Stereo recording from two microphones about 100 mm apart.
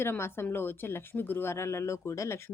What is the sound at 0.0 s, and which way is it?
Speech, 25° left (ahead or behind).